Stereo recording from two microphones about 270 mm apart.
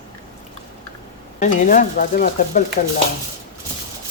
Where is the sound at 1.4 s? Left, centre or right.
Left.